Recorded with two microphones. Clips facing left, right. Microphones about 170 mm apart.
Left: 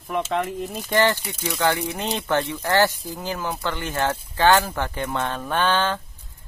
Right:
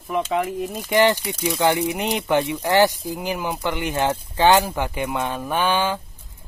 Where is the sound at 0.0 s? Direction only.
Centre (ahead or behind).